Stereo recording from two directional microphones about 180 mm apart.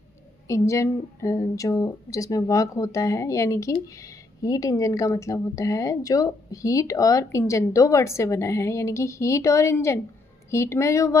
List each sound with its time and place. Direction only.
0.4 s a woman's voice: 15° left (ahead or behind)